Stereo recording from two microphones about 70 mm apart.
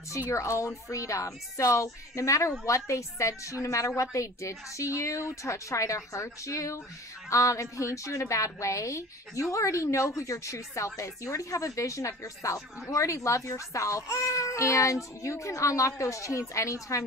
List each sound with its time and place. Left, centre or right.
0.3 s a woman's voice: left